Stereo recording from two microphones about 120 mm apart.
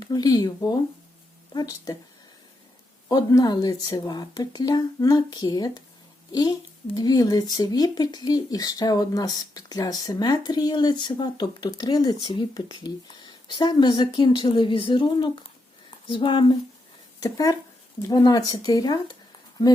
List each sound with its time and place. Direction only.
0.0 s speech: 35° left (ahead or behind)
3.1 s speech: 30° left (ahead or behind)
17.2 s speech: 30° left (ahead or behind)